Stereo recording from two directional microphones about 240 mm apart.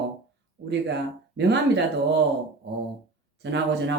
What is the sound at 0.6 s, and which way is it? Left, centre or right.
Speech, right.